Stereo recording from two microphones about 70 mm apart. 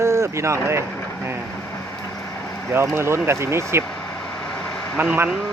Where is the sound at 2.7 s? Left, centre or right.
Right.